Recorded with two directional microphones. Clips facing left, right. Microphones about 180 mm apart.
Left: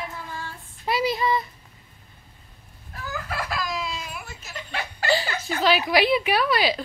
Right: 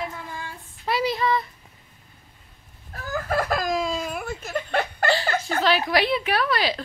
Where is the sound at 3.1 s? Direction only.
45° right (ahead or behind).